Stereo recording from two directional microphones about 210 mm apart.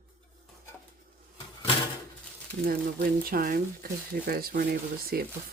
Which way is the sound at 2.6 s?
45° right (ahead or behind).